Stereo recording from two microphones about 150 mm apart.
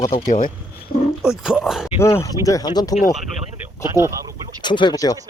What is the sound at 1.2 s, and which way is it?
Speech, 5° right (ahead or behind).